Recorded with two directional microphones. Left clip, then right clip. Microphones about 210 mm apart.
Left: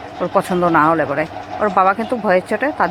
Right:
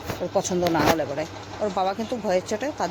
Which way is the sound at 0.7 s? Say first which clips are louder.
Left 9 dB; 5° left (ahead or behind).